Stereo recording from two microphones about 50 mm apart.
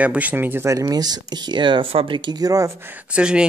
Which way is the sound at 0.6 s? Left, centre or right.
Right.